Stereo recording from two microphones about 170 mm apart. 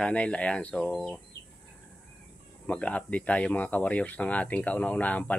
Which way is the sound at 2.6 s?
5° left (ahead or behind).